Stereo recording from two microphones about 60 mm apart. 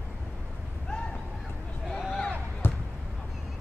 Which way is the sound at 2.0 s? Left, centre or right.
Centre.